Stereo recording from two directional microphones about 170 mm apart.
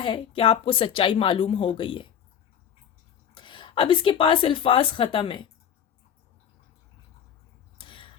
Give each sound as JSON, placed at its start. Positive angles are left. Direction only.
{"t": 0.0, "sound": "a woman's voice", "side_deg": 30}
{"t": 3.3, "sound": "a woman's voice", "side_deg": 30}
{"t": 7.8, "sound": "a sound", "side_deg": 30}